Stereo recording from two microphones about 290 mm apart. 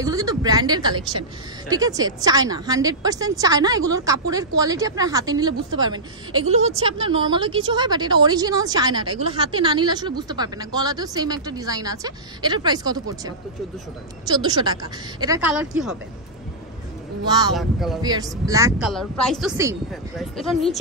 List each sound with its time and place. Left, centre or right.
0.0 s a woman's voice: centre
17.3 s a woman's voice: centre
17.6 s a woman's voice: centre
18.0 s a woman's voice: centre
18.9 s a woman's voice: centre
19.5 s a woman's voice: centre
20.3 s a woman's voice: centre